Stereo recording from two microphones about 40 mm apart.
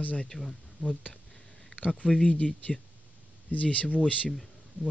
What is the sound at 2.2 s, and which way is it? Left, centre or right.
Speech, left.